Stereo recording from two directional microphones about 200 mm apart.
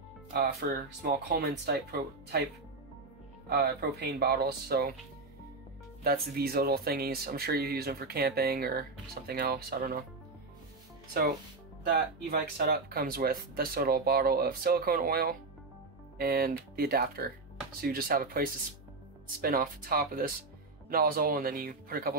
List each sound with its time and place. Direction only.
0.6 s speech: 50° right (ahead or behind)
3.4 s speech: 50° right (ahead or behind)
6.0 s speech: 50° right (ahead or behind)
11.9 s speech: 50° right (ahead or behind)